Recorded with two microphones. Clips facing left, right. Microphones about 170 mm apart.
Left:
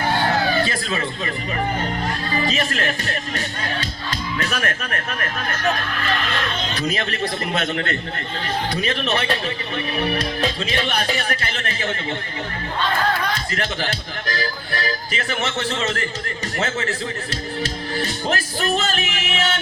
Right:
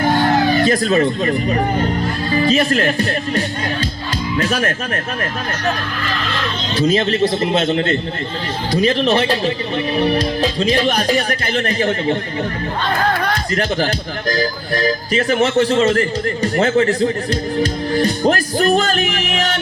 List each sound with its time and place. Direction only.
0.6 s a man's voice: 40° right (ahead or behind)
4.4 s a man's voice: 35° right (ahead or behind)
6.7 s a man's voice: 30° right (ahead or behind)
13.1 s a man's voice: 45° right (ahead or behind)